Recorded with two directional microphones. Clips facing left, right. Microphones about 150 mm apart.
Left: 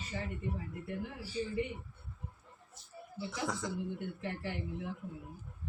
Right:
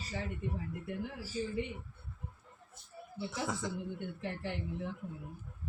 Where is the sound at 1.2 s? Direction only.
40° right (ahead or behind).